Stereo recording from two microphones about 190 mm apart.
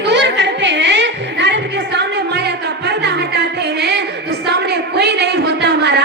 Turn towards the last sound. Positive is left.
turn(degrees=-65)  # may be behind; listen again after turning